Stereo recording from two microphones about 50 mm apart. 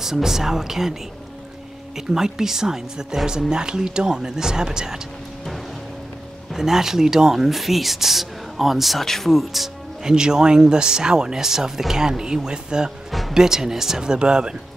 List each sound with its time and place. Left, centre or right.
0.0 s speech: centre
2.0 s speech: centre
6.5 s speech: centre
10.0 s speech: centre